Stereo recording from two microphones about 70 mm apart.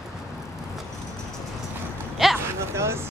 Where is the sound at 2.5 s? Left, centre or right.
Right.